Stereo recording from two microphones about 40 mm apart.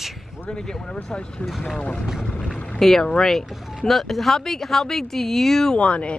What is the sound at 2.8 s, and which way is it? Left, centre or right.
Speech, centre.